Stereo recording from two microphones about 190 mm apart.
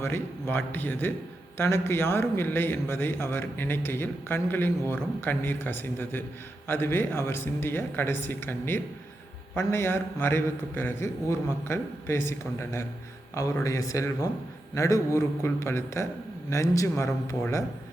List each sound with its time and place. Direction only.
0.0 s a man's voice: 10° left (ahead or behind)